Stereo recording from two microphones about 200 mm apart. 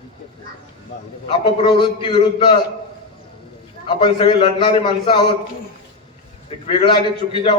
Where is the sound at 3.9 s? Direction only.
25° left (ahead or behind).